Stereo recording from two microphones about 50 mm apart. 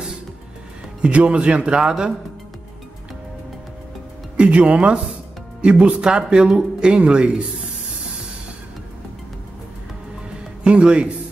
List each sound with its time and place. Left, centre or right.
1.0 s speech: right
4.4 s speech: right
10.6 s speech: centre